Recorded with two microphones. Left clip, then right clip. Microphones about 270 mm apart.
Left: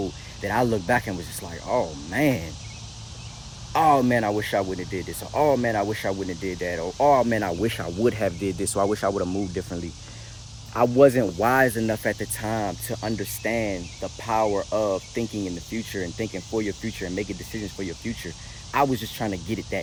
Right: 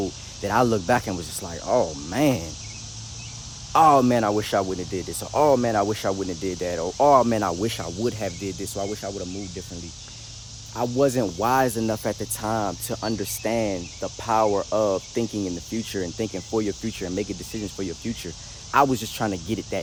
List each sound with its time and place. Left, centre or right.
0.4 s speech: centre
3.7 s speech: right; by 9.6 s centre
10.8 s speech: centre